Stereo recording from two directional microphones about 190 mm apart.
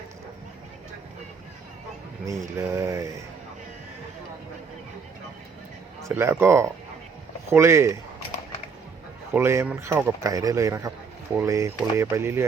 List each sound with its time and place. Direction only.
2.2 s speech: 15° right (ahead or behind)
6.0 s speech: 15° right (ahead or behind)
9.3 s speech: 15° right (ahead or behind)